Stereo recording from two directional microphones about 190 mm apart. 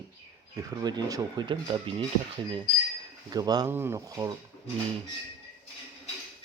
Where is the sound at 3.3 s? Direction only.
20° right (ahead or behind).